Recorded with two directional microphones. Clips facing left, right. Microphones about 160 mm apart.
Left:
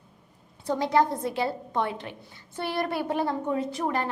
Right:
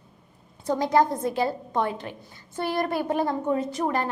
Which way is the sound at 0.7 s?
45° right (ahead or behind).